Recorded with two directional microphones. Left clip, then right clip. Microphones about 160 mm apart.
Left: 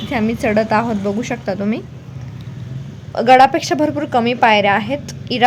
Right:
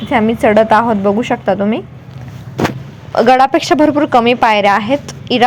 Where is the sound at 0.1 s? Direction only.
10° right (ahead or behind).